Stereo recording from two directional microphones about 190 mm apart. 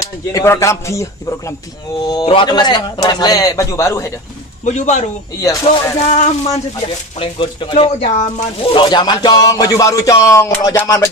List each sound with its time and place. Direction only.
0.3 s a sound: 15° left (ahead or behind)
2.0 s music: 25° left (ahead or behind)
4.6 s speech: 35° left (ahead or behind)
5.4 s a sound: 15° left (ahead or behind)
6.1 s speech: 35° left (ahead or behind)
7.2 s music: 25° left (ahead or behind)